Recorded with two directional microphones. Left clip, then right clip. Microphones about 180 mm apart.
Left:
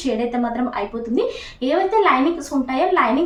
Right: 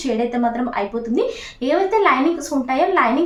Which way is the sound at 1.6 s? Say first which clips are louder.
Even; 30° right (ahead or behind).